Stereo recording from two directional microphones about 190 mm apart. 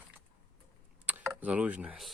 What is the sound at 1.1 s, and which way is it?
Speech, 10° right (ahead or behind).